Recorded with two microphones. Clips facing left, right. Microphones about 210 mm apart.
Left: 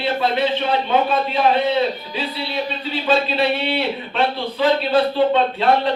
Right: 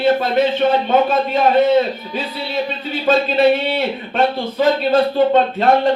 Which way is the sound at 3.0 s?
45° right (ahead or behind).